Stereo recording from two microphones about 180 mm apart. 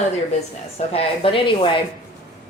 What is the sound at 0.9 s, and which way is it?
Speech, 30° left (ahead or behind).